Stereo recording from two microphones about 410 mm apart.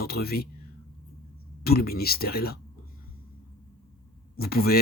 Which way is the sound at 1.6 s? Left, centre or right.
Left.